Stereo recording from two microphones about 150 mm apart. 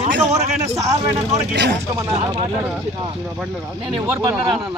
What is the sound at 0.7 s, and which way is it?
Speech, 20° right (ahead or behind).